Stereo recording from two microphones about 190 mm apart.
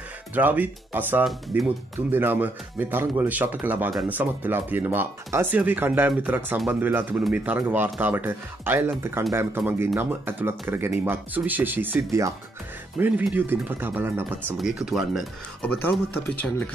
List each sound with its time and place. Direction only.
0.3 s speech: 10° right (ahead or behind)
15.6 s speech: 10° left (ahead or behind)